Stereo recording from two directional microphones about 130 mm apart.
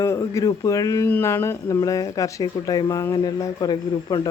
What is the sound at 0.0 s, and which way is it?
Speech, 20° left (ahead or behind).